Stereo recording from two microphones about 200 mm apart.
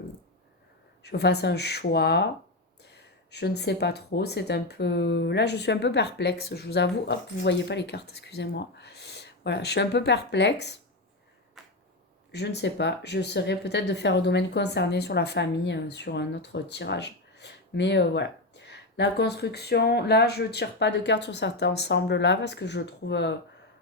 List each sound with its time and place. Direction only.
1.0 s speech: 55° left (ahead or behind)
12.3 s speech: 55° left (ahead or behind)